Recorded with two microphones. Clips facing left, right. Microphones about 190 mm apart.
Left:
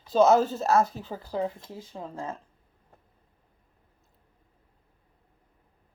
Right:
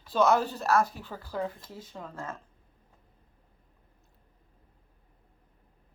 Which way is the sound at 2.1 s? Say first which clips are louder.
Left 4 dB; 15° left (ahead or behind).